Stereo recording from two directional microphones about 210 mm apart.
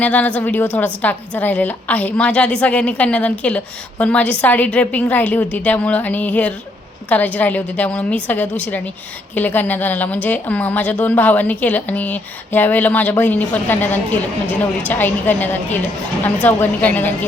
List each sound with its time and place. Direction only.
0.0 s a woman's voice: 5° left (ahead or behind)